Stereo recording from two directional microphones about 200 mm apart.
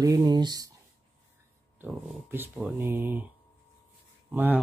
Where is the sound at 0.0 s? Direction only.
20° right (ahead or behind).